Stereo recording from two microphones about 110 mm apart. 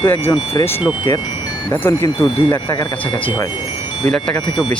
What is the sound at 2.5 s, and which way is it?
Speech, 40° left (ahead or behind).